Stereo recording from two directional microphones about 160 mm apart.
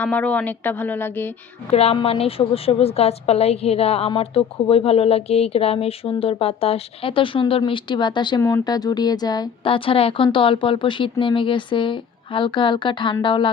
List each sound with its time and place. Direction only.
0.0 s speech: 10° left (ahead or behind)
1.7 s a woman's voice: 40° left (ahead or behind)
8.4 s a woman's voice: 20° left (ahead or behind)